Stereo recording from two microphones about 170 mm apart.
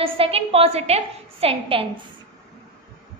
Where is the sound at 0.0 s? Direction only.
35° right (ahead or behind).